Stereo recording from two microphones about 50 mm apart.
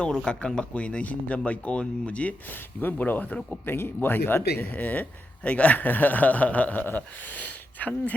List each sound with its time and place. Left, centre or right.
0.0 s speech: centre
2.5 s a man's voice: left
4.7 s a man's voice: left